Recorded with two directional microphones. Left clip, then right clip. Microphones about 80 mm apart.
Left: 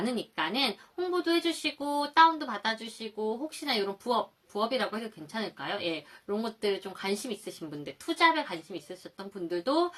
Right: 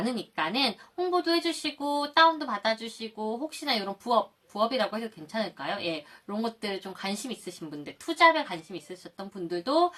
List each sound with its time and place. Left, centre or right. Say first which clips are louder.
0.0 s speech: right 1 dB; right